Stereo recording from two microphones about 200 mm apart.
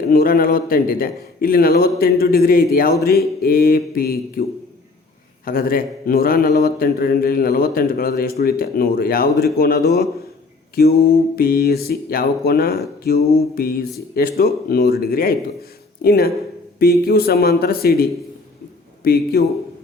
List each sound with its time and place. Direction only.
0.1 s speech: 45° left (ahead or behind)
5.5 s speech: 45° left (ahead or behind)